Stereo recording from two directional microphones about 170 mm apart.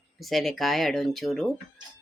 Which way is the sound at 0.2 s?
Centre (ahead or behind).